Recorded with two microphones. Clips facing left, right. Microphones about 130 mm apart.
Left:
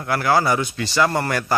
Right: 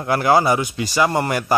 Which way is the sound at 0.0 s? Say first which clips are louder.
Right 3 dB; 20° right (ahead or behind).